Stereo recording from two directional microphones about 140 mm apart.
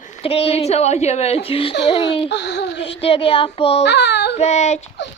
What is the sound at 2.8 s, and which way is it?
Speech, 40° left (ahead or behind).